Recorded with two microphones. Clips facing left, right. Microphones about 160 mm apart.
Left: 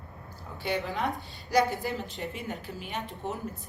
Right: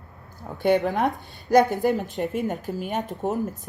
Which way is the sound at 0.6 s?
50° right (ahead or behind).